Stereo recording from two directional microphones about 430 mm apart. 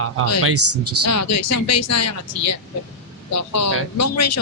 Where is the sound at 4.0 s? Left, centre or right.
Left.